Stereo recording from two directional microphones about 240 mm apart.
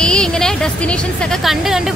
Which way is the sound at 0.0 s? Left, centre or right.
Centre.